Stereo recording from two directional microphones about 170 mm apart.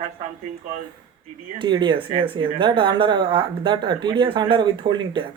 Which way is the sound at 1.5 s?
30° right (ahead or behind).